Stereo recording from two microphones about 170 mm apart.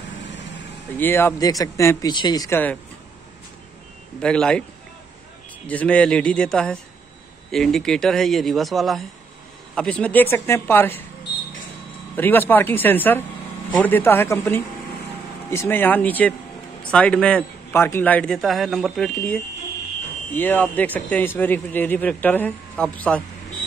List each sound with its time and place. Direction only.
0.9 s speech: 10° left (ahead or behind)
4.2 s a man's voice: 5° left (ahead or behind)
5.7 s a man's voice: 10° left (ahead or behind)
12.2 s a man's voice: 10° left (ahead or behind)